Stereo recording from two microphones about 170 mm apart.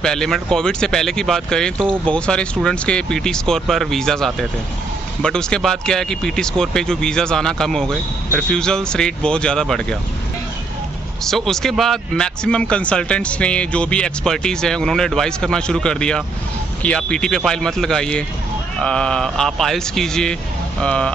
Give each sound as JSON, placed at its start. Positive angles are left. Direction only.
{"t": 0.0, "sound": "speech", "side_deg": 5}
{"t": 11.2, "sound": "speech", "side_deg": 0}